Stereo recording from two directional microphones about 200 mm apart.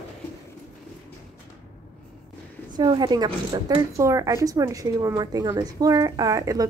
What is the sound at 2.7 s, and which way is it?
Speech, 20° right (ahead or behind).